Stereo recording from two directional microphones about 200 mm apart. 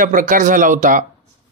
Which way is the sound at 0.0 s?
40° right (ahead or behind).